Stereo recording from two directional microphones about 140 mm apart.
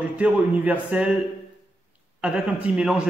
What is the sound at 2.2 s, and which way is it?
Speech, 5° right (ahead or behind).